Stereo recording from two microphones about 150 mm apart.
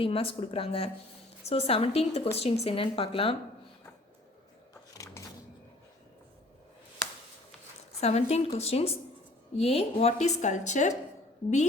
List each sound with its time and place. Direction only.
0.0 s a woman's voice: 40° left (ahead or behind)
4.7 s a sound: 20° left (ahead or behind)
8.0 s a woman's voice: 45° left (ahead or behind)